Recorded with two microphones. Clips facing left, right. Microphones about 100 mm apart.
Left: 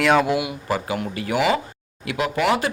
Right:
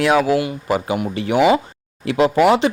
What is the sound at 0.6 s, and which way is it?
Speech, 20° right (ahead or behind).